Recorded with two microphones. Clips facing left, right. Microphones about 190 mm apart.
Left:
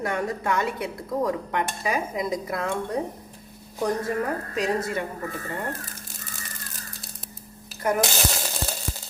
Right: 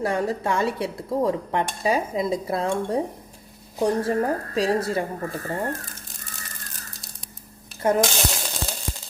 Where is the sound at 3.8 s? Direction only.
30° right (ahead or behind).